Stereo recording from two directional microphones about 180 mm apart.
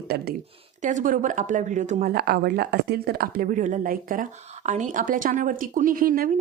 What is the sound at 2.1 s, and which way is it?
A woman's voice, 60° right (ahead or behind).